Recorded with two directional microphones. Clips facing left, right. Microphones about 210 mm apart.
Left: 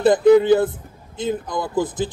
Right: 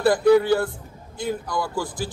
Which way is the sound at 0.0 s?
20° left (ahead or behind).